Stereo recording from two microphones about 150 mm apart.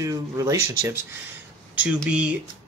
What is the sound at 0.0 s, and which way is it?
Speech, 20° right (ahead or behind).